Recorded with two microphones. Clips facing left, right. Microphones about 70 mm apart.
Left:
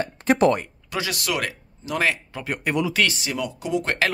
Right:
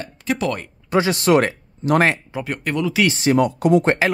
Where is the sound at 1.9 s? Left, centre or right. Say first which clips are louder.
Right 7 dB; right.